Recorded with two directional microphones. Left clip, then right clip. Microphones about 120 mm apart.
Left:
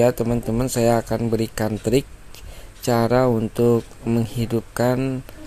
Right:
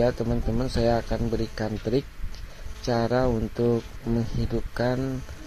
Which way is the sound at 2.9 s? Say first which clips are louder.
Left 6 dB; 20° left (ahead or behind).